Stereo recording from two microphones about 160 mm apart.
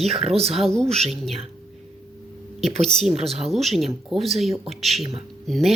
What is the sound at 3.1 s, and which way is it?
Speech, 40° right (ahead or behind).